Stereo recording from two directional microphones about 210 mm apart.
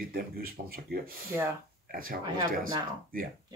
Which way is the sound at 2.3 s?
20° right (ahead or behind).